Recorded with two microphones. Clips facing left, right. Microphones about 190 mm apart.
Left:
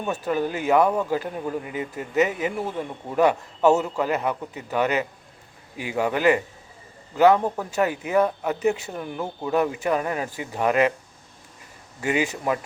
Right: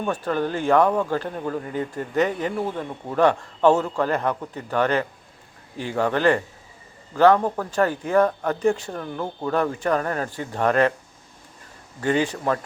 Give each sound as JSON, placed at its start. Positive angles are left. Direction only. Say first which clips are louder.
{"t": 0.0, "sound": "speech", "louder": "right 1 dB", "side_deg": 10}
{"t": 11.9, "sound": "speech", "louder": "right 2 dB", "side_deg": 10}